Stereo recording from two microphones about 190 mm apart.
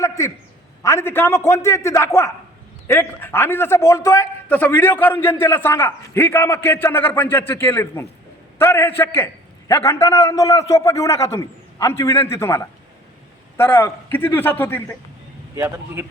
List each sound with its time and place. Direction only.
0.0 s a sound: 15° left (ahead or behind)
0.8 s a man's voice: 15° left (ahead or behind)
15.5 s a man's voice: 15° right (ahead or behind)